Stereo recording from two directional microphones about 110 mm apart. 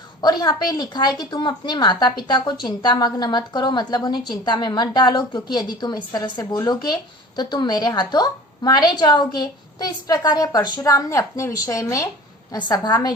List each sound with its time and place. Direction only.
0.2 s a woman's voice: 40° left (ahead or behind)